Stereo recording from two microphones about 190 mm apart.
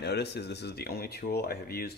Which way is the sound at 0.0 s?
60° left (ahead or behind).